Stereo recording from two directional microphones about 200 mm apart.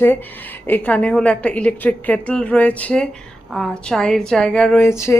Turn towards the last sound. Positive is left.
turn(degrees=15)  # may be behind; listen again after turning